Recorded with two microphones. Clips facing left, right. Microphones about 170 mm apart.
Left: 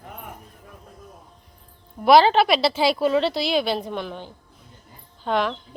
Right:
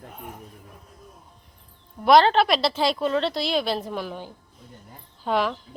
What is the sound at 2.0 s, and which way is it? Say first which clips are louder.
Speech: left 2 dB; 5° left (ahead or behind).